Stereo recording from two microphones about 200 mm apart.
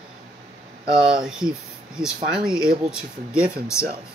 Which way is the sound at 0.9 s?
5° right (ahead or behind).